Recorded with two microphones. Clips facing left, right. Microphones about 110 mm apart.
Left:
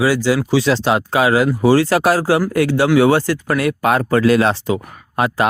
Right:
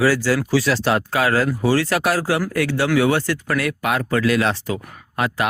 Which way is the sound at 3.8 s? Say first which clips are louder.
Left 7 dB; 40° left (ahead or behind).